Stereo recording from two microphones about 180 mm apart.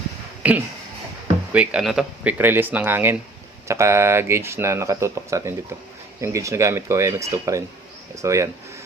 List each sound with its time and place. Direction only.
0.4 s speech: 10° right (ahead or behind)